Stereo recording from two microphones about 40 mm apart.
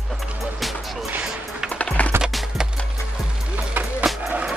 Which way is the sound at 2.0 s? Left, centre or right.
Left.